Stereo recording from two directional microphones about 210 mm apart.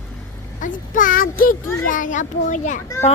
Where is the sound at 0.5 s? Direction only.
40° left (ahead or behind).